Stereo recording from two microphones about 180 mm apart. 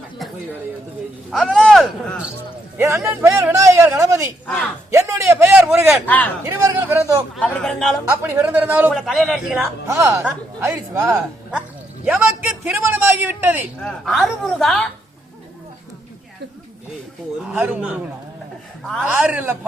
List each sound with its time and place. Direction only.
1.3 s speech: centre (ahead or behind)
2.7 s a man's voice: 15° right (ahead or behind)
4.4 s speech: 5° left (ahead or behind)
4.9 s a man's voice: 15° right (ahead or behind)
5.9 s speech: 10° left (ahead or behind)
6.4 s a man's voice: 15° right (ahead or behind)
7.3 s a woman's voice: 5° left (ahead or behind)
8.1 s a man's voice: 15° right (ahead or behind)
9.8 s a man's voice: 15° right (ahead or behind)
12.0 s a man's voice: 5° right (ahead or behind)
14.0 s a woman's voice: centre (ahead or behind)
17.5 s a man's voice: 5° right (ahead or behind)
19.0 s a man's voice: 10° right (ahead or behind)